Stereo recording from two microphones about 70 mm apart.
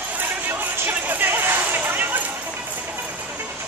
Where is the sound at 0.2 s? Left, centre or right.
Right.